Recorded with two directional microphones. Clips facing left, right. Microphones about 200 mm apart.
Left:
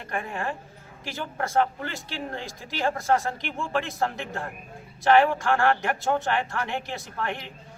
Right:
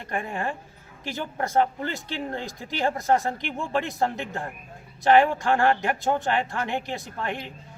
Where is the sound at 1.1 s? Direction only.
20° right (ahead or behind).